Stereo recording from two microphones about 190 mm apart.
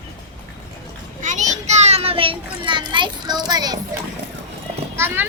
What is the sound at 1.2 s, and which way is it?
A child's voice, 40° right (ahead or behind).